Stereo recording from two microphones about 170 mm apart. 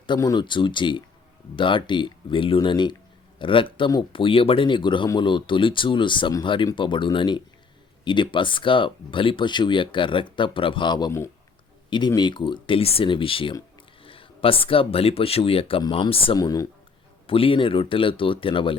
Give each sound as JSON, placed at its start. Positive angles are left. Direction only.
{"t": 0.1, "sound": "speech", "side_deg": 25}
{"t": 17.2, "sound": "speech", "side_deg": 35}